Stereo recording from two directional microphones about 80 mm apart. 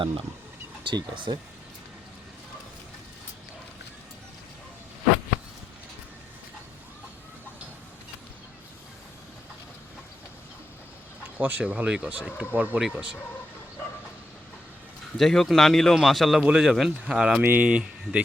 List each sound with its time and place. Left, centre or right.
0.9 s speech: right
11.3 s speech: right
15.2 s speech: centre
17.4 s speech: centre